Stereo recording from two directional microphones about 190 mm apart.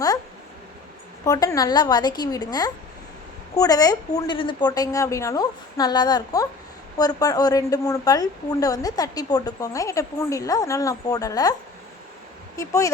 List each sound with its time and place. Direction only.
1.2 s a woman's voice: 20° left (ahead or behind)
12.5 s speech: 15° left (ahead or behind)